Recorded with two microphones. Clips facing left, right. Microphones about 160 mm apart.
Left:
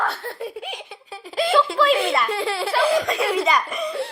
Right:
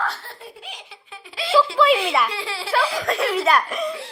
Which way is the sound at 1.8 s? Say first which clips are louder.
Right 2 dB; centre (ahead or behind).